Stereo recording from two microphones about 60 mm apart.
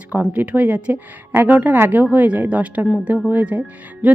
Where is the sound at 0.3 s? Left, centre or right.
Right.